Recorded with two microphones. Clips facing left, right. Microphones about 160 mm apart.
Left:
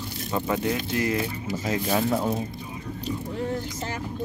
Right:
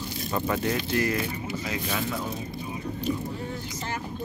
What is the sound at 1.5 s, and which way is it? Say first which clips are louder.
Speech: left 5 dB; 35° left (ahead or behind).